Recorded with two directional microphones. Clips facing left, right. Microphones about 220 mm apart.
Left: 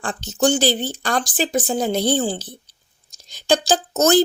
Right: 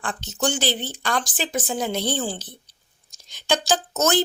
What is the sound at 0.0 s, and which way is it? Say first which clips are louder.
Speech: left 6 dB; 35° left (ahead or behind).